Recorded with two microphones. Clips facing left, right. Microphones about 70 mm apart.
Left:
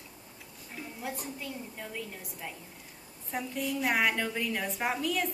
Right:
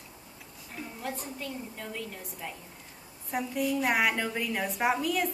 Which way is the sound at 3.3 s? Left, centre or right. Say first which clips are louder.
Right 4 dB; centre.